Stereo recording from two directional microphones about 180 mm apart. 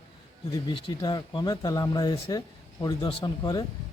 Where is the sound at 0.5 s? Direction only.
25° left (ahead or behind).